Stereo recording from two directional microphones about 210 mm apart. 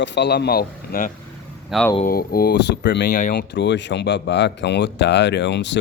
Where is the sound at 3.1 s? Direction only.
40° left (ahead or behind); by 5.8 s 60° left (ahead or behind).